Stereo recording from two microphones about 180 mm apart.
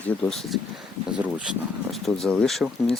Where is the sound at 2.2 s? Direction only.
Centre (ahead or behind).